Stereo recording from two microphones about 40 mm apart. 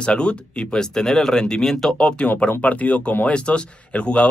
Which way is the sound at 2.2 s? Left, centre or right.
Left.